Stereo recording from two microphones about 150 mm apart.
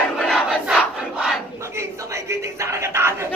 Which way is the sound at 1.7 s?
20° right (ahead or behind).